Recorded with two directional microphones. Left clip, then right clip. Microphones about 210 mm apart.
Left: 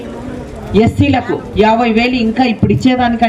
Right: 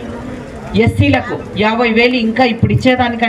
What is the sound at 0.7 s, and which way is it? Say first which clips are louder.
Speech: left 1 dB; 50° left (ahead or behind).